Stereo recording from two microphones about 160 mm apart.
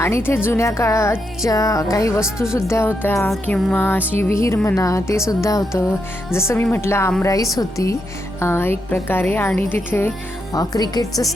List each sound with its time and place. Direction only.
0.0 s a woman's voice: 15° left (ahead or behind)
2.2 s speech: 5° right (ahead or behind)
2.6 s a woman's voice: 15° left (ahead or behind)